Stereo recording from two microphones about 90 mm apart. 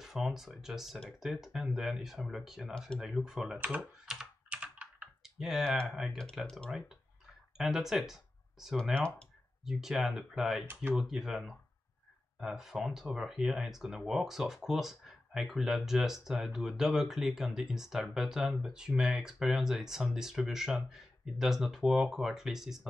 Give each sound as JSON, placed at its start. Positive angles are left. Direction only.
{"t": 0.0, "sound": "speech", "side_deg": -5}
{"t": 3.5, "sound": "speech", "side_deg": -15}
{"t": 4.0, "sound": "computer keyboard", "side_deg": -5}
{"t": 5.2, "sound": "typing", "side_deg": -5}
{"t": 5.9, "sound": "speech", "side_deg": -5}
{"t": 7.5, "sound": "speech", "side_deg": -5}
{"t": 10.7, "sound": "speech", "side_deg": -25}
{"t": 11.0, "sound": "speech", "side_deg": -5}